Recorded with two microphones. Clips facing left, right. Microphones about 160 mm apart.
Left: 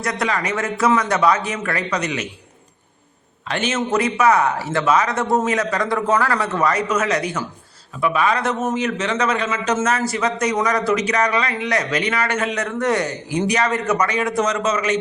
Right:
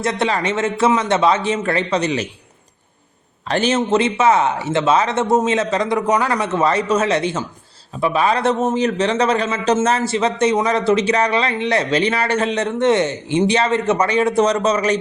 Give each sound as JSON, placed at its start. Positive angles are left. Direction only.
{"t": 0.0, "sound": "a man's voice", "side_deg": -25}
{"t": 3.5, "sound": "a man's voice", "side_deg": -35}